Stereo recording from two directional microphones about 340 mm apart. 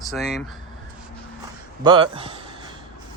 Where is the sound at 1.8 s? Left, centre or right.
Centre.